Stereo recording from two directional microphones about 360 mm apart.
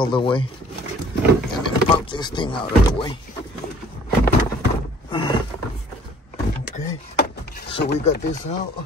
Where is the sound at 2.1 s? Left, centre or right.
Centre.